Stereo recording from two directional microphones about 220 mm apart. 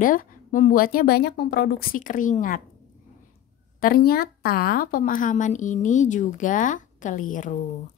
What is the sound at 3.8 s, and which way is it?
Speech, 40° left (ahead or behind).